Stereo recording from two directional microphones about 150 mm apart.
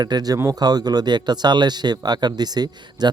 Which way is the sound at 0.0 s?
25° right (ahead or behind).